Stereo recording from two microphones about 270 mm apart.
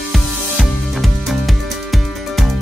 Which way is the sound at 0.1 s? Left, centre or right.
Centre.